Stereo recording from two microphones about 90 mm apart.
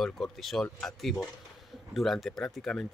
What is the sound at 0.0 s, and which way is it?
Speech, 5° left (ahead or behind).